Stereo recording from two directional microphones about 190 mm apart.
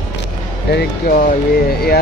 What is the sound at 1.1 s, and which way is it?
Speech, 55° left (ahead or behind).